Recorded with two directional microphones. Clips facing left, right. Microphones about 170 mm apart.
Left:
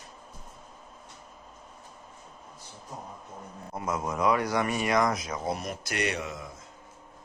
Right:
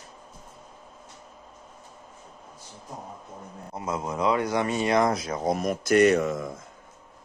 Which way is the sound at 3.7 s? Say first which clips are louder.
Right 1 dB; 25° right (ahead or behind).